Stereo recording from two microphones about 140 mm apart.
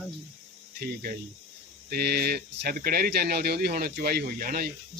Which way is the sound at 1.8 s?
90° right.